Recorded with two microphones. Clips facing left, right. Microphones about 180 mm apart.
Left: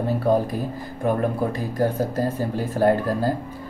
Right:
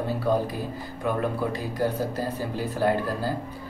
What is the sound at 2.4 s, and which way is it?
Speech, 50° left (ahead or behind).